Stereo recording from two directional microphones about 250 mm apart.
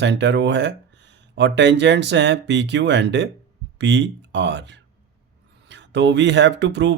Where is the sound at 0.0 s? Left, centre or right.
Right.